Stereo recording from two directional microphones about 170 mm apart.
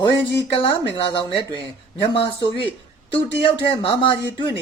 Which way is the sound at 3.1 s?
30° left (ahead or behind).